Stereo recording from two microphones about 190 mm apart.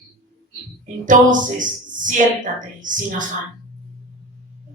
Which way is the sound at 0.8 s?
45° right (ahead or behind).